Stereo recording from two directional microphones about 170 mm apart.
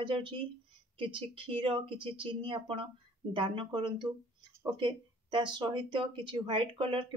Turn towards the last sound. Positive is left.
turn(degrees=-30)  # may be behind; listen again after turning